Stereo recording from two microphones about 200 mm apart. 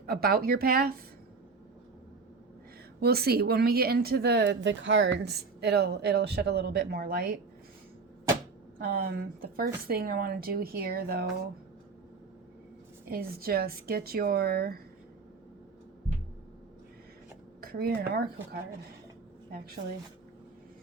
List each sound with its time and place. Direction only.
0.0 s speech: 50° right (ahead or behind)
3.0 s speech: 50° right (ahead or behind)
8.8 s speech: 50° right (ahead or behind)
13.1 s speech: 50° right (ahead or behind)
17.6 s speech: 50° right (ahead or behind)